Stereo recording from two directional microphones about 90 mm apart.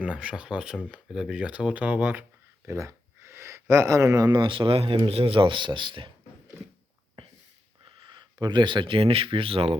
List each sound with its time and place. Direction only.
0.0 s speech: 10° right (ahead or behind)
2.6 s a sound: 35° right (ahead or behind)
4.4 s speech: 70° right (ahead or behind)
7.9 s speech: 60° right (ahead or behind); by 9.6 s 85° right